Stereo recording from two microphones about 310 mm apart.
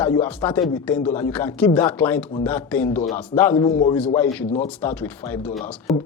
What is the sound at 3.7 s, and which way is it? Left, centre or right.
Speech, left.